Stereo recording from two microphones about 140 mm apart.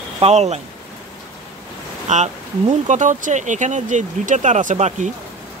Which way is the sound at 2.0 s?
55° right (ahead or behind).